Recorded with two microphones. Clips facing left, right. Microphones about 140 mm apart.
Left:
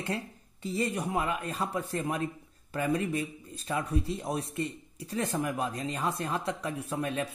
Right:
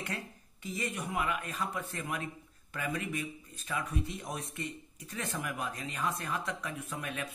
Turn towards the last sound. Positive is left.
turn(degrees=30)  # may be behind; listen again after turning